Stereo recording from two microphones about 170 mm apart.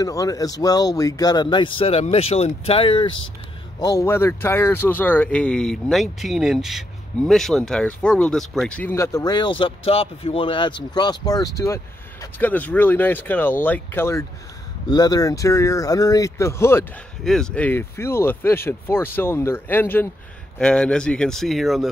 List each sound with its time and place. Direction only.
0.0 s speech: 20° left (ahead or behind)
3.8 s speech: 15° left (ahead or behind)
17.2 s speech: 5° left (ahead or behind)